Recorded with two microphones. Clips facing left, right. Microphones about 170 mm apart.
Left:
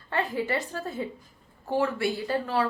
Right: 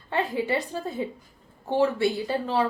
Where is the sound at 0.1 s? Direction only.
15° right (ahead or behind).